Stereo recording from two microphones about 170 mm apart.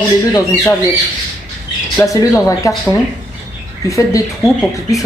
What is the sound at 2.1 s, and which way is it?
Speech, 15° left (ahead or behind).